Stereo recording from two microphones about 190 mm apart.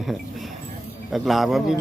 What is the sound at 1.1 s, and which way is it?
Speech, centre (ahead or behind).